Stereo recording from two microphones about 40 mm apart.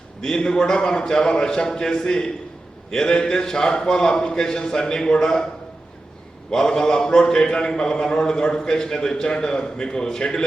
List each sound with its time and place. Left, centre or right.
0.2 s a man's voice: centre
6.5 s a man's voice: centre